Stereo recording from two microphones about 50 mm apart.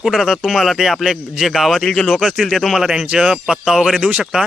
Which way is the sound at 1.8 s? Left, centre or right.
Centre.